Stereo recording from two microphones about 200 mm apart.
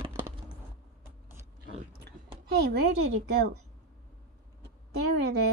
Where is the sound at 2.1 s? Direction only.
55° right (ahead or behind).